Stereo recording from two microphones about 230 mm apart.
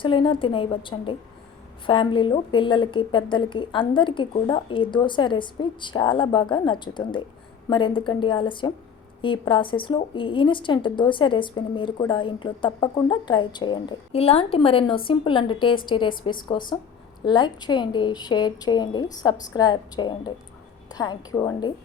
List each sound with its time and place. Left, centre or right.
0.0 s a woman's voice: left